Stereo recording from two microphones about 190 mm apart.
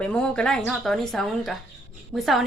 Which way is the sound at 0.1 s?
5° left (ahead or behind).